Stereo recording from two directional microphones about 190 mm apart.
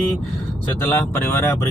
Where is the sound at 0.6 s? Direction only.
10° left (ahead or behind).